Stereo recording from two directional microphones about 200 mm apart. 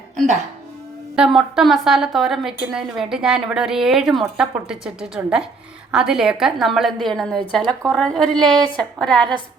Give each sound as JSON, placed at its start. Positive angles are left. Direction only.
{"t": 1.1, "sound": "a woman's voice", "side_deg": -5}
{"t": 7.6, "sound": "speech", "side_deg": -25}
{"t": 7.9, "sound": "a woman's voice", "side_deg": 5}